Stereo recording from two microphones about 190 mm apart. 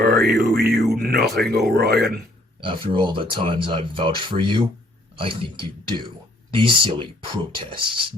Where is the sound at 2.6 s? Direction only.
25° right (ahead or behind).